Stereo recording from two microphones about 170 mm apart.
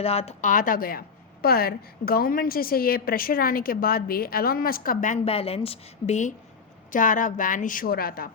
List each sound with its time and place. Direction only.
0.0 s a woman's voice: 35° left (ahead or behind)
0.5 s a woman's voice: 55° left (ahead or behind)
5.2 s a woman's voice: 35° left (ahead or behind); by 8.3 s 60° left (ahead or behind)